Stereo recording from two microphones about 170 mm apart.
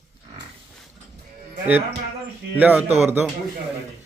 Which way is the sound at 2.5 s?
10° right (ahead or behind).